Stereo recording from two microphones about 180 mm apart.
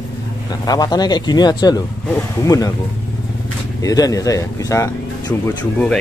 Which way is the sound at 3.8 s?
20° left (ahead or behind).